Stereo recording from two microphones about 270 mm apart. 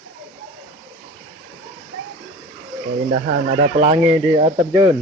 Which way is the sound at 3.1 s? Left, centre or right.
Right.